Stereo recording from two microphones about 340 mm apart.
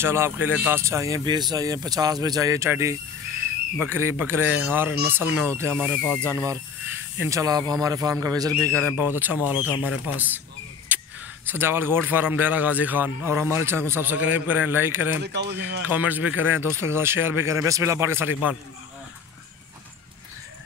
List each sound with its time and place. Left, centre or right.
0.0 s a man's voice: centre
10.9 s a sound: centre
11.4 s a man's voice: centre
15.2 s speech: right
15.8 s speech: centre